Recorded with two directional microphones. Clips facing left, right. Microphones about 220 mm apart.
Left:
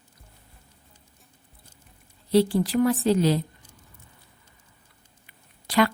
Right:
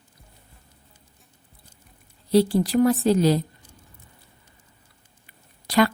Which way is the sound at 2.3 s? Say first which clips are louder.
Right 2 dB; 40° right (ahead or behind).